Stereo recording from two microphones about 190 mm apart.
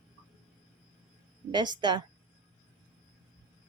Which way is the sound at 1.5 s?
25° right (ahead or behind).